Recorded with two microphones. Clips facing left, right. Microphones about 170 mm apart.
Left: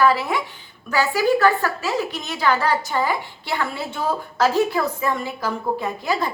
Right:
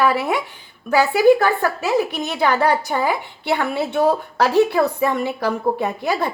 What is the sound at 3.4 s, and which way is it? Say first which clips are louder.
A woman's voice: right 5 dB; 65° right (ahead or behind).